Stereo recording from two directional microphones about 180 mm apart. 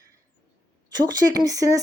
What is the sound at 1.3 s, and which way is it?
Speech, 20° right (ahead or behind).